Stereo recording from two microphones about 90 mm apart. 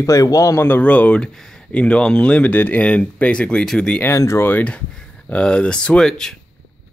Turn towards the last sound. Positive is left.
turn(degrees=5)  # may be behind; listen again after turning